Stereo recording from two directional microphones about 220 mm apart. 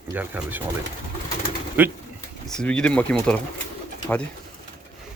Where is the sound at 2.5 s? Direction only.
5° left (ahead or behind).